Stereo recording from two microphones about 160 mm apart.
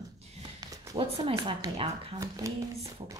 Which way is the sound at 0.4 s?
25° right (ahead or behind).